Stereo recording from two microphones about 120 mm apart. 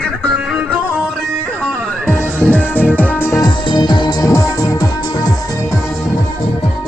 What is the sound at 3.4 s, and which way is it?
Music, 40° left (ahead or behind).